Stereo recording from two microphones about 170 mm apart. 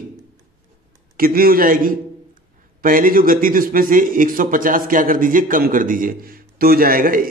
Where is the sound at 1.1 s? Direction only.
60° right (ahead or behind).